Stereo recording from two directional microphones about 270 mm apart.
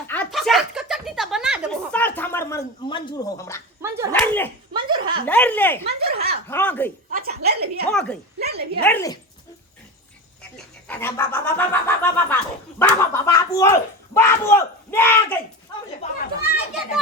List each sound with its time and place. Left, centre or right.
0.1 s a sound: centre
3.8 s speech: centre
4.1 s speech: centre
4.7 s chuckle: centre
5.2 s speech: centre
5.9 s speech: right
6.5 s speech: centre
7.1 s a sound: right
7.9 s speech: centre
8.4 s a sound: right
8.8 s speech: centre
10.8 s speech: centre
16.0 s chatter: left